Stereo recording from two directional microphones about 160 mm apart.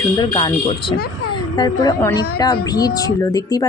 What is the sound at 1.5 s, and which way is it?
A woman's voice, 25° left (ahead or behind).